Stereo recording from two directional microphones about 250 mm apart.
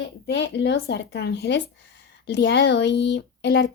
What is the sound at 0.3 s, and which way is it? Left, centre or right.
Speech, left.